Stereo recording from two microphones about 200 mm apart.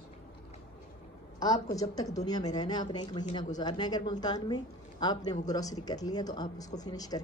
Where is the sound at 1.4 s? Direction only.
20° left (ahead or behind).